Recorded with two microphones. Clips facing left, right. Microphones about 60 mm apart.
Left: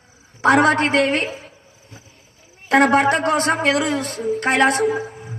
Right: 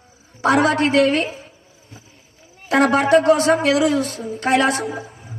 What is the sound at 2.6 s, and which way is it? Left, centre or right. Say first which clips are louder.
Speech: left 2 dB; left.